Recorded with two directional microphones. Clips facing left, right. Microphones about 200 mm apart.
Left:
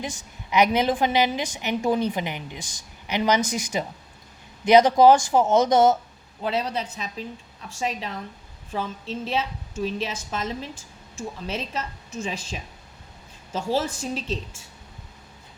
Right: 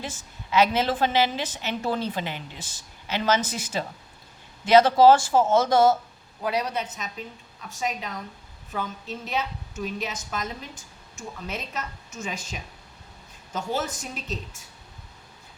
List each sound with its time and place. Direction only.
0.0 s a woman's voice: 15° left (ahead or behind)